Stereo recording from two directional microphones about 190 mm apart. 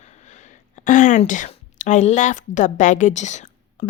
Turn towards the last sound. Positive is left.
turn(degrees=40)  # may be behind; listen again after turning